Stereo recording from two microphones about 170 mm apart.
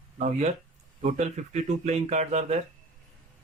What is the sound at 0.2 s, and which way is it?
Speech, 40° right (ahead or behind).